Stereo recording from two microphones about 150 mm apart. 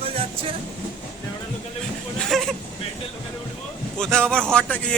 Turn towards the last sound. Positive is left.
turn(degrees=5)  # may be behind; listen again after turning